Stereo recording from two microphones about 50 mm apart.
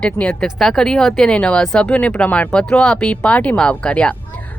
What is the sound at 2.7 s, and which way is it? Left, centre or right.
Speech, centre.